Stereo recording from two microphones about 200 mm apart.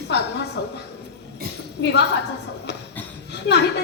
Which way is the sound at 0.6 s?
60° left (ahead or behind).